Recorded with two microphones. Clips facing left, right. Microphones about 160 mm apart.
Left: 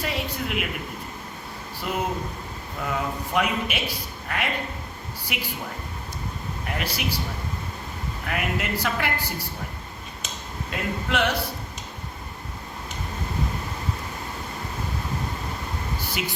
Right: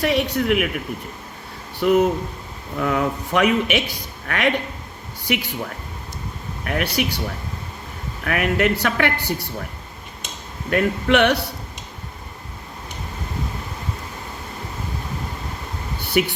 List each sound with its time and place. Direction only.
0.0 s speech: 70° right (ahead or behind)
1.8 s speech: 65° right (ahead or behind)
6.7 s speech: 65° right (ahead or behind)
8.2 s speech: 70° right (ahead or behind)
10.7 s speech: 70° right (ahead or behind)
16.0 s a sound: 65° right (ahead or behind)